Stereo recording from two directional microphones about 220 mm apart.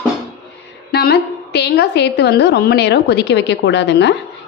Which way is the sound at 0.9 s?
45° left (ahead or behind).